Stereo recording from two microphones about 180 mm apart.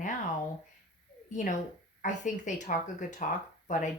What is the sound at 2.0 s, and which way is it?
Speech, 45° left (ahead or behind).